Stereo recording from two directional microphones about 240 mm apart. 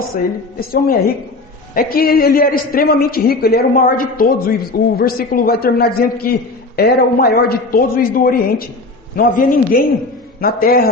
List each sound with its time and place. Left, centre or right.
0.7 s a man's voice: left